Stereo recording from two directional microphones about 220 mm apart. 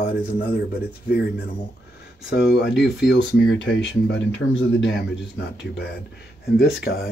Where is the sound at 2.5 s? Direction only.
50° left (ahead or behind).